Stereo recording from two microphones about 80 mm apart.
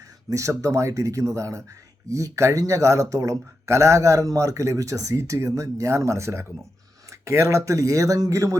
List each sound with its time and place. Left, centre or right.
0.3 s speech: right